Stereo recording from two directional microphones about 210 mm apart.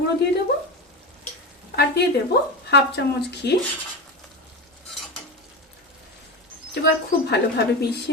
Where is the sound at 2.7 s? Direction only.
55° left (ahead or behind).